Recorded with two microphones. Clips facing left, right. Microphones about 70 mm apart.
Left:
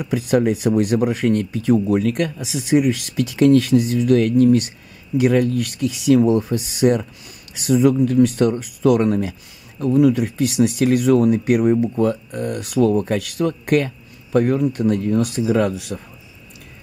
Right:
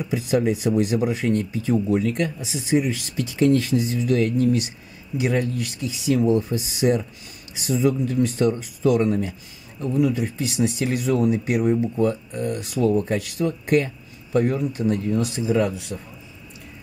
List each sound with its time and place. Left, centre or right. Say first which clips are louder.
0.0 s speech: left 4 dB; left
9.8 s speech: left 6 dB; left
10.0 s speech: left 6 dB; left